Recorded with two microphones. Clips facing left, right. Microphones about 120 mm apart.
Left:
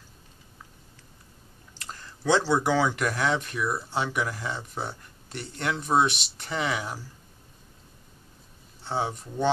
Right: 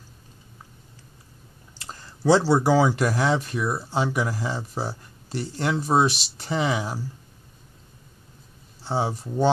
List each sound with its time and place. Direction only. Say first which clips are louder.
1.8 s speech: right 5 dB; 30° right (ahead or behind)
8.9 s speech: right 3 dB; 30° right (ahead or behind)